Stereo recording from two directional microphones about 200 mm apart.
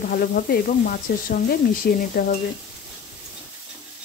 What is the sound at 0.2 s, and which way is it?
Speech, 45° left (ahead or behind).